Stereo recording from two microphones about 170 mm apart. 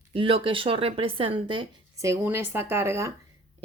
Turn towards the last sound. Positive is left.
turn(degrees=-15)  # may be behind; listen again after turning